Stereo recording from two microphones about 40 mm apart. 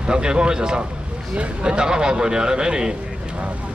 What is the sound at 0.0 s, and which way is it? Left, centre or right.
A man's voice, right.